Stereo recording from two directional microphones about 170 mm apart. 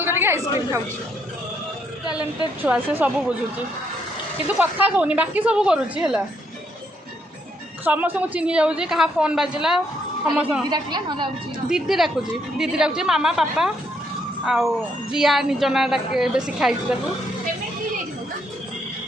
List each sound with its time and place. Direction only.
0.0 s a sound: 15° right (ahead or behind)
2.6 s a woman's voice: 10° right (ahead or behind)
4.4 s a woman's voice: 10° right (ahead or behind)
7.9 s a woman's voice: 10° right (ahead or behind)
10.7 s a woman's voice: 25° right (ahead or behind)
11.7 s a woman's voice: centre (ahead or behind)